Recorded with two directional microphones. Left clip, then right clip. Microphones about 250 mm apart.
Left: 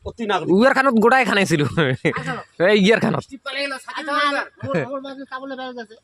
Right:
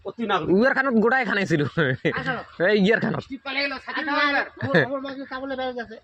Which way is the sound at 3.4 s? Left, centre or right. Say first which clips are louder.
Right 1 dB; left.